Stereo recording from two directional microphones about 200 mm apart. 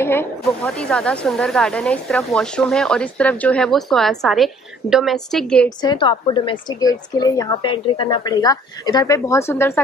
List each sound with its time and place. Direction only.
0.0 s speech: 10° left (ahead or behind)
5.8 s a woman's voice: 20° left (ahead or behind)